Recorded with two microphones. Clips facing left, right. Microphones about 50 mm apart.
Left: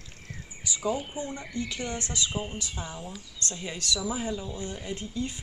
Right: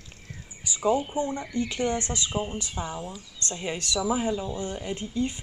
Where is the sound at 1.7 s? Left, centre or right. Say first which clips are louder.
Right 6 dB; right.